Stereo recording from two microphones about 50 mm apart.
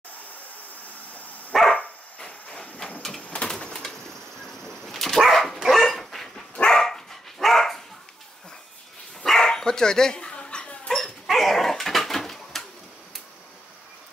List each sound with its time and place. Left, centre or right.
1.8 s dog: left
3.3 s bird: centre
4.6 s dog: centre
6.6 s dog: centre
9.2 s dog: centre
11.0 s dog: centre